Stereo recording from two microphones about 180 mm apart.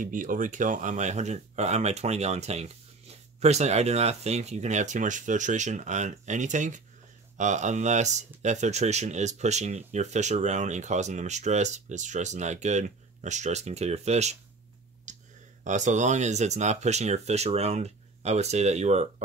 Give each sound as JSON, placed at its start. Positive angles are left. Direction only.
{"t": 0.0, "sound": "speech", "side_deg": -45}
{"t": 15.1, "sound": "clicking", "side_deg": -45}
{"t": 15.6, "sound": "speech", "side_deg": -40}